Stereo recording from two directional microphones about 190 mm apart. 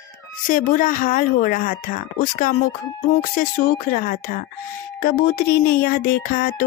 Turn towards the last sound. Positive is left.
turn(degrees=50)  # may be behind; listen again after turning